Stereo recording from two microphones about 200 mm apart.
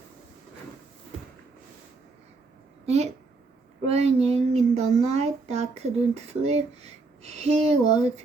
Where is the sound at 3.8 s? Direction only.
30° right (ahead or behind).